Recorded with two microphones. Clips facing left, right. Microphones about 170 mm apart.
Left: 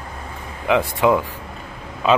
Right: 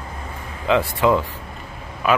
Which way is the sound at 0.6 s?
15° left (ahead or behind).